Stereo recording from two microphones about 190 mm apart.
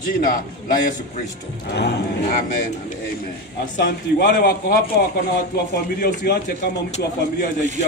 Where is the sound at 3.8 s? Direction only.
45° left (ahead or behind).